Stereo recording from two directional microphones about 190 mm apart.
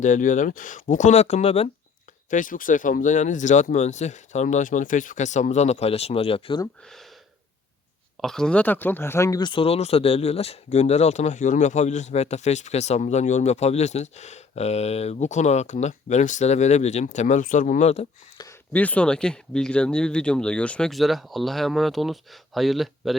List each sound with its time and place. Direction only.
0.0 s speech: 40° left (ahead or behind)
2.3 s speech: 45° left (ahead or behind); by 6.7 s 25° left (ahead or behind)
6.8 s speech: centre (ahead or behind)
8.2 s speech: 5° left (ahead or behind); by 18.0 s 35° left (ahead or behind)
18.7 s speech: 10° left (ahead or behind)